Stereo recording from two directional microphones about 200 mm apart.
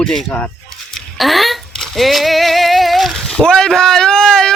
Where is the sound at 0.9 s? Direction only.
Centre (ahead or behind).